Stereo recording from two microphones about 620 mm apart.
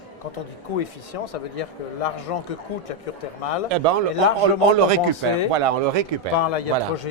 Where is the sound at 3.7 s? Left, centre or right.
Right.